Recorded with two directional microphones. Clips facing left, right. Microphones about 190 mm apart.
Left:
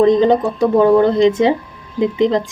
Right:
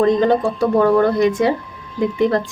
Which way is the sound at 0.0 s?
20° left (ahead or behind).